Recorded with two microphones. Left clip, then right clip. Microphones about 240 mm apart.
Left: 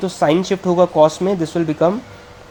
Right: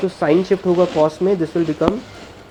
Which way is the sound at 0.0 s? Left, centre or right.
Left.